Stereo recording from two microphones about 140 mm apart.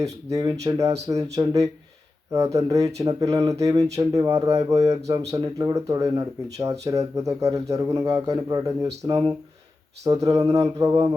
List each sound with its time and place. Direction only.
0.0 s speech: 25° right (ahead or behind)